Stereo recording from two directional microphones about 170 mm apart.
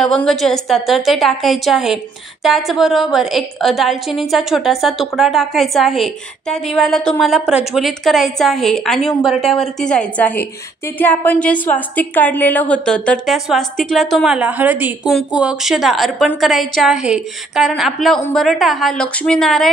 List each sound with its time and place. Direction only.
0.0 s a woman's voice: 5° left (ahead or behind)